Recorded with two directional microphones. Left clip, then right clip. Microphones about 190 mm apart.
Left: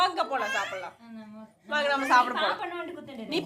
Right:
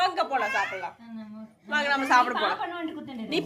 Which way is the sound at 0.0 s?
10° left (ahead or behind).